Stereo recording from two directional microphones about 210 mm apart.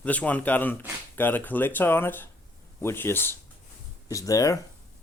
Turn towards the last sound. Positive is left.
turn(degrees=15)  # may be behind; listen again after turning